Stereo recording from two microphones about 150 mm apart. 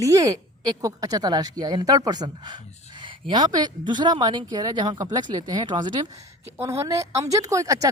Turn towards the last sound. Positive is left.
turn(degrees=-20)  # may be behind; listen again after turning